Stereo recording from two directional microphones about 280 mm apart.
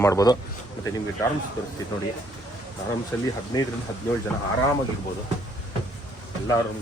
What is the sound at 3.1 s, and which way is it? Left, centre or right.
Speech, centre.